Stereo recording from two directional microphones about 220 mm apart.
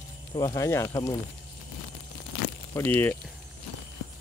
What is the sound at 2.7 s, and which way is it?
Speech, 10° left (ahead or behind).